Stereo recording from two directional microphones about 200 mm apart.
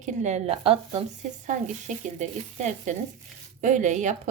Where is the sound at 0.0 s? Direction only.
35° right (ahead or behind).